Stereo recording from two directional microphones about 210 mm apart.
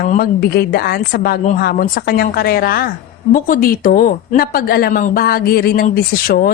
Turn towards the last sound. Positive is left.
turn(degrees=45)  # may be behind; listen again after turning